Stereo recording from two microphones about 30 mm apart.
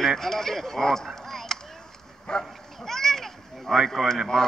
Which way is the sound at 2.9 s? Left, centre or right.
Centre.